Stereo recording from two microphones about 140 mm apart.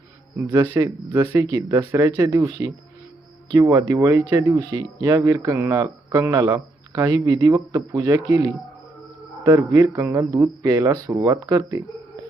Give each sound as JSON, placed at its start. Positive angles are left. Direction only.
{"t": 0.7, "sound": "speech", "side_deg": -20}